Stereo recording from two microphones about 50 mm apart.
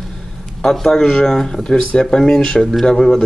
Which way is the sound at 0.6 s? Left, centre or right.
Centre.